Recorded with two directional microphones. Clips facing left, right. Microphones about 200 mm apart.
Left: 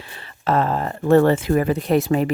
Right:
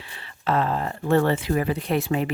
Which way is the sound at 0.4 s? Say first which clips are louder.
Left 3 dB; 45° left (ahead or behind).